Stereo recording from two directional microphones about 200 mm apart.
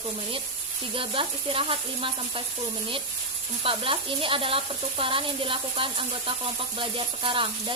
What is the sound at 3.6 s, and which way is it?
Speech, 25° right (ahead or behind).